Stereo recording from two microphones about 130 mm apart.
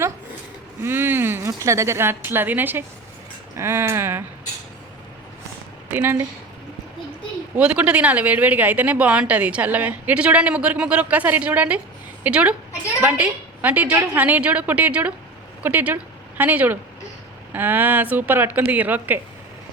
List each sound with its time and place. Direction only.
0.8 s a sound: 15° right (ahead or behind)
1.6 s speech: 20° right (ahead or behind)
5.9 s speech: 15° right (ahead or behind)
7.5 s speech: 10° right (ahead or behind)